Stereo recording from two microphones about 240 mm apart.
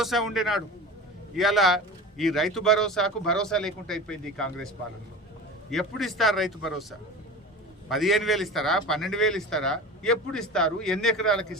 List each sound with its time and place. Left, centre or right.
0.0 s speech: centre
5.7 s speech: centre
7.9 s speech: centre